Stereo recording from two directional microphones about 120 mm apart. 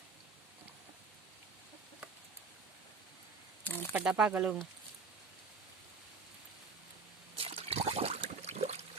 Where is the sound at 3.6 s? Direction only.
15° left (ahead or behind).